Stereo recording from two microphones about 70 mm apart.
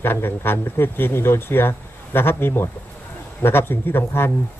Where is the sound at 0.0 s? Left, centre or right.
Left.